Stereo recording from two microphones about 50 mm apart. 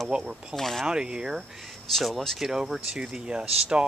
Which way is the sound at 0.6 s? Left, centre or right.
Centre.